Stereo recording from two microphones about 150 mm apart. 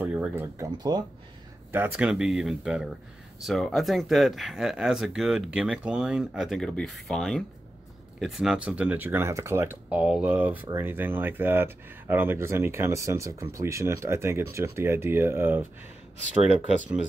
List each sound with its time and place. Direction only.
0.0 s a sound: 10° right (ahead or behind)
0.6 s speech: 25° right (ahead or behind)
1.7 s speech: 15° right (ahead or behind)
2.0 s speech: centre (ahead or behind)